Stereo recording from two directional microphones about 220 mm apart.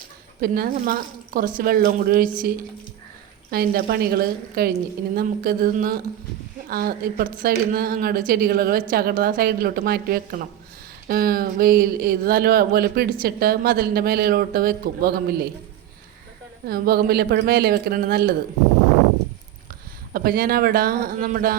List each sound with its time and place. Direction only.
0.4 s speech: 40° right (ahead or behind)
3.5 s speech: 45° right (ahead or behind)
16.6 s speech: 45° right (ahead or behind)
20.1 s speech: 45° right (ahead or behind)